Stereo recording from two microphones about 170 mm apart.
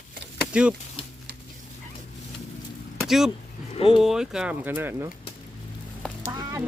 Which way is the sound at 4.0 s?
Centre (ahead or behind).